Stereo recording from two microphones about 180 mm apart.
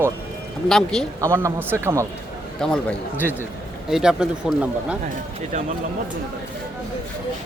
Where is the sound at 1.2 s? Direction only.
15° right (ahead or behind).